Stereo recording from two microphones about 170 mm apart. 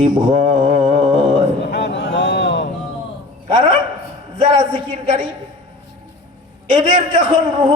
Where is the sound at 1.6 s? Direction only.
85° left.